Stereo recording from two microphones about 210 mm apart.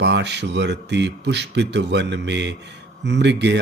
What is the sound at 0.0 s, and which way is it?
Speech, 55° right (ahead or behind).